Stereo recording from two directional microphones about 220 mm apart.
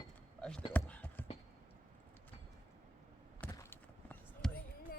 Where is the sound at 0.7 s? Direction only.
5° left (ahead or behind).